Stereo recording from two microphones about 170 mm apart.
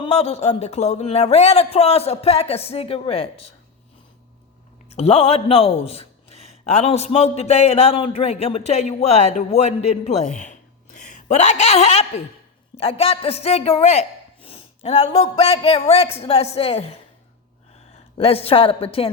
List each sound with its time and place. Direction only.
0.0 s a man's voice: 40° left (ahead or behind)
4.9 s a man's voice: 35° left (ahead or behind)
18.2 s a man's voice: 35° left (ahead or behind)